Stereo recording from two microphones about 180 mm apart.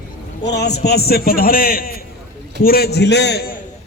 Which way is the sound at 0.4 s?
70° left (ahead or behind).